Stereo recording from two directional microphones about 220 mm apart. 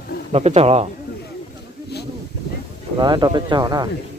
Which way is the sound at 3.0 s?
20° right (ahead or behind).